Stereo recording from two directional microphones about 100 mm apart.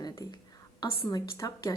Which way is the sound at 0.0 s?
45° left (ahead or behind).